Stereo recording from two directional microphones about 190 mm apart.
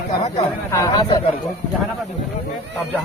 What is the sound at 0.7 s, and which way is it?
Speech, 20° left (ahead or behind).